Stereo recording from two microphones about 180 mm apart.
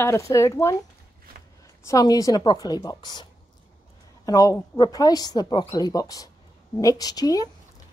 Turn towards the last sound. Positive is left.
turn(degrees=20)  # may be behind; listen again after turning